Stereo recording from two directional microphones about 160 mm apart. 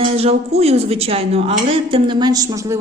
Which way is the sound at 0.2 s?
40° right (ahead or behind).